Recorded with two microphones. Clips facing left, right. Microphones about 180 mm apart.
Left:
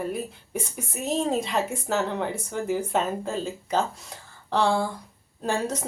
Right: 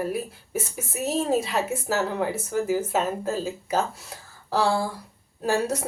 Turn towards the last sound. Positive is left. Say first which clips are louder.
# right 3 dB
turn(degrees=-10)  # may be behind; listen again after turning